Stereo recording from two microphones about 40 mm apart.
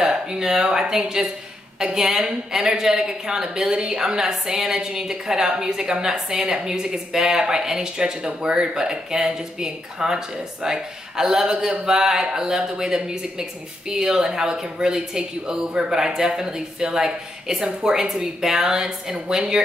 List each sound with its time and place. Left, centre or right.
0.3 s a woman's voice: centre
19.1 s speech: right